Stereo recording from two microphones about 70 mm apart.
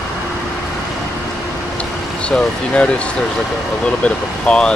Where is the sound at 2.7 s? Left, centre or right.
Centre.